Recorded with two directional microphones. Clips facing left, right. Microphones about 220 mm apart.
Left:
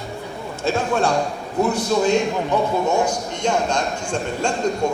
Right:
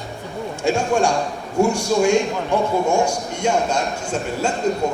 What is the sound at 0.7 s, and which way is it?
A man's voice, 15° right (ahead or behind).